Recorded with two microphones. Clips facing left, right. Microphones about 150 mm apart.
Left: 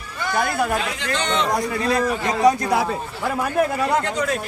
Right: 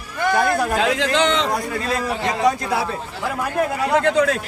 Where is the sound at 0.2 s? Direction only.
50° right (ahead or behind).